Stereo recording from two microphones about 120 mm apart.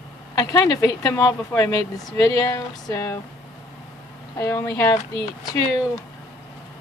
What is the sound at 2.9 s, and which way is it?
Speech, 20° left (ahead or behind).